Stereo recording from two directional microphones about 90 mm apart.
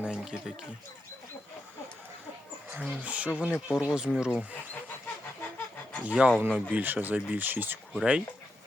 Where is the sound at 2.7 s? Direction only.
15° right (ahead or behind).